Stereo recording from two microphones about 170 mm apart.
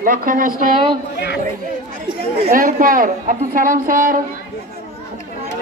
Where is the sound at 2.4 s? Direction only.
55° right (ahead or behind).